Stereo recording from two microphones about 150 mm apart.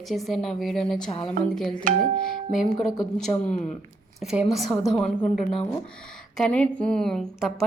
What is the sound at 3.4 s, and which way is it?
Speech, 50° left (ahead or behind).